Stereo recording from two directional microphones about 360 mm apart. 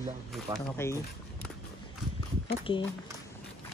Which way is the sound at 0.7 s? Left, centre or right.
Centre.